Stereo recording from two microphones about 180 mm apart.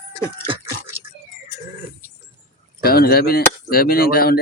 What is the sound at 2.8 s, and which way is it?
Speech, 60° left (ahead or behind).